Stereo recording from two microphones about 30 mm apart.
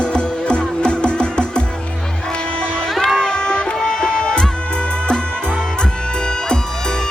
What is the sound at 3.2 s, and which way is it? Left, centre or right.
Music, left.